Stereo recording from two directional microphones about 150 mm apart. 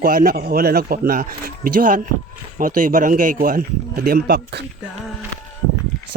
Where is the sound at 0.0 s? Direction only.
75° right (ahead or behind).